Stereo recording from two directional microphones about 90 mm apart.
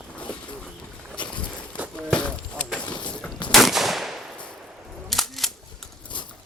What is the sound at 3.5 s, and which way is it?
Gunshot, centre (ahead or behind).